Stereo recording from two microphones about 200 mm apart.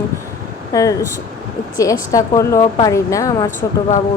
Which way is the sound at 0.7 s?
15° left (ahead or behind).